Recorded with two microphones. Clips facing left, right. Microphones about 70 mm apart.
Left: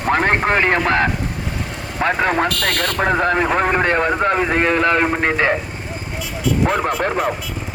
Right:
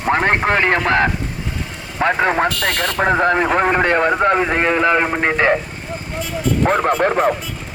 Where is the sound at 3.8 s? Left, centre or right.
Right.